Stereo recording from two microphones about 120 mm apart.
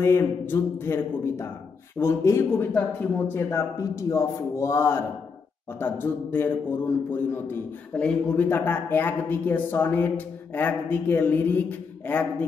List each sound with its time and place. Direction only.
0.0 s a man's voice: 20° left (ahead or behind)